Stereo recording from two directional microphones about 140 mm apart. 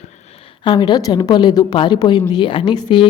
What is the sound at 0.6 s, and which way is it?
A woman's voice, 30° left (ahead or behind).